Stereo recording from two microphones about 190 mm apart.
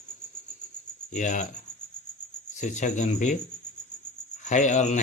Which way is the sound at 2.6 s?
40° left (ahead or behind).